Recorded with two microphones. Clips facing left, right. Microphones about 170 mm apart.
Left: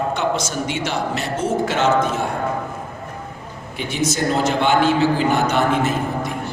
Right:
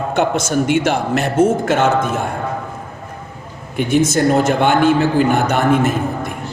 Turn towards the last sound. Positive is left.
turn(degrees=-50)  # may be behind; listen again after turning